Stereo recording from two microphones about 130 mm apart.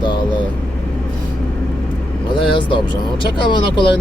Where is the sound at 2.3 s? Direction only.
40° left (ahead or behind).